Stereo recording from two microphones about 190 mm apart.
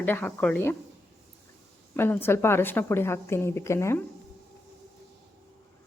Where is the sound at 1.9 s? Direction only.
10° left (ahead or behind).